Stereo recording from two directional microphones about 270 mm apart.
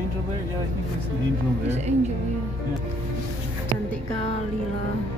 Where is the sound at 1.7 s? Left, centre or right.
Right.